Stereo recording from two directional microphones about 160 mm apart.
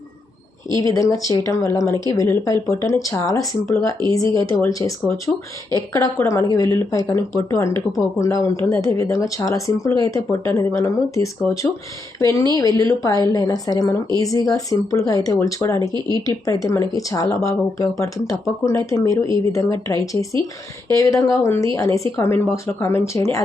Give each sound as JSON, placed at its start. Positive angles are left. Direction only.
{"t": 0.8, "sound": "speech", "side_deg": 20}
{"t": 15.9, "sound": "speech", "side_deg": -30}
{"t": 16.6, "sound": "speech", "side_deg": 20}